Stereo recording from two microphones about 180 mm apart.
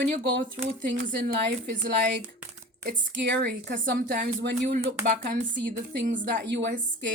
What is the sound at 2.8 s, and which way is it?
A woman's voice, 70° right (ahead or behind).